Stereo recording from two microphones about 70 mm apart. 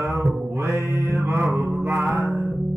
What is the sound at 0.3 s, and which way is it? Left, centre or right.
Mantra, right.